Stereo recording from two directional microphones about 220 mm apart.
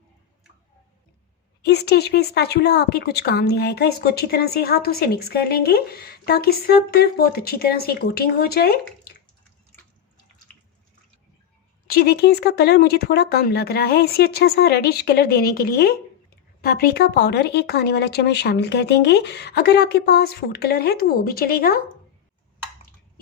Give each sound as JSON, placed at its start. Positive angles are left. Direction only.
{"t": 1.6, "sound": "a woman's voice", "side_deg": 50}
{"t": 11.9, "sound": "a woman's voice", "side_deg": 45}